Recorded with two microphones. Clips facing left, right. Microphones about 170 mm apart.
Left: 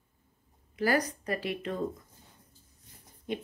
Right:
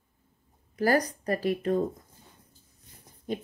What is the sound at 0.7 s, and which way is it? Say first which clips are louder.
A woman's voice: right 3 dB; 40° right (ahead or behind).